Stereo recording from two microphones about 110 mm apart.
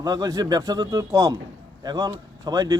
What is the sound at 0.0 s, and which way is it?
Speech, 35° right (ahead or behind).